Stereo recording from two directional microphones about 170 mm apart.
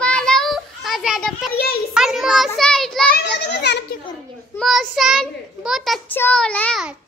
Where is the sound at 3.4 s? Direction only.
90° left.